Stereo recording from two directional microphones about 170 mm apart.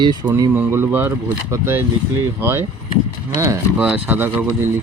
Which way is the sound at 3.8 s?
5° right (ahead or behind).